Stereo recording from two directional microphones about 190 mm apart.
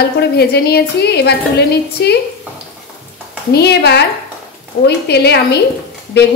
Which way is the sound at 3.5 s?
60° left (ahead or behind).